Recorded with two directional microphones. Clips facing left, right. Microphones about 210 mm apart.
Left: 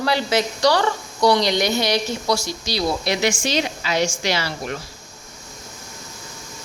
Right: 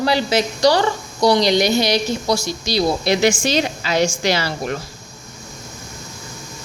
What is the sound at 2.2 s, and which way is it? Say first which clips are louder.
Speech: right 2 dB; 20° right (ahead or behind).